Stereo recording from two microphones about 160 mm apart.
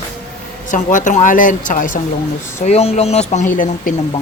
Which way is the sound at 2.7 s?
40° left (ahead or behind).